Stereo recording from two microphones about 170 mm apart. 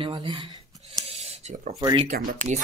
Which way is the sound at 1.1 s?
40° right (ahead or behind).